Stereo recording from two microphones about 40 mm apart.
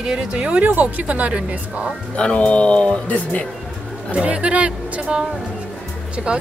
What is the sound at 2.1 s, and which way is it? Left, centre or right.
Speech, left.